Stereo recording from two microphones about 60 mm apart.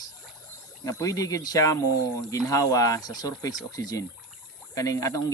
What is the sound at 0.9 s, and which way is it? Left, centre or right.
Speech, left.